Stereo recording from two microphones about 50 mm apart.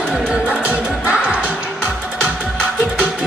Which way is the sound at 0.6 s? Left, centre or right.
Right.